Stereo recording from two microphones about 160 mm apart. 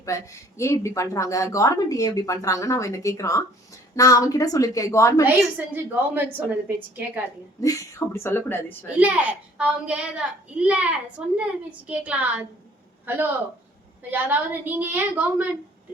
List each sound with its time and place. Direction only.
0.0 s speech: 20° left (ahead or behind)
5.2 s a woman's voice: 10° right (ahead or behind)
7.6 s speech: 20° left (ahead or behind)
9.0 s a woman's voice: 10° right (ahead or behind)